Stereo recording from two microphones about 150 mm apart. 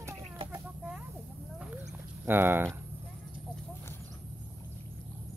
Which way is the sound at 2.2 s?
15° right (ahead or behind).